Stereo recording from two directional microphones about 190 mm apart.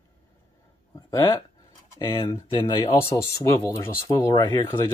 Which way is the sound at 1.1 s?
15° left (ahead or behind).